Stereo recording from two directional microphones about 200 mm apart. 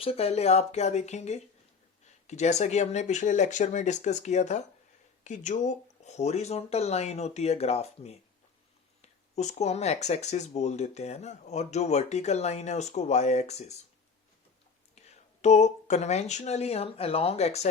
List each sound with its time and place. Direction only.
0.0 s speech: 30° left (ahead or behind)
14.9 s speech: 35° left (ahead or behind)